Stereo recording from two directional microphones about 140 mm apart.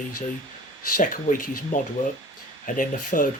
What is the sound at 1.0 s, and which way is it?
Speech, 70° left (ahead or behind).